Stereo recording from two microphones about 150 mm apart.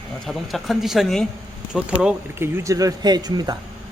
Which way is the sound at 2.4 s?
20° right (ahead or behind).